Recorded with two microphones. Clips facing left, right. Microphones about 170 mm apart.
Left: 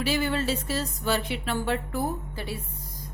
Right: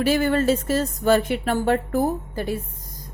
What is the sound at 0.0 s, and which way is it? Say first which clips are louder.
A woman's voice: right 7 dB; 50° right (ahead or behind).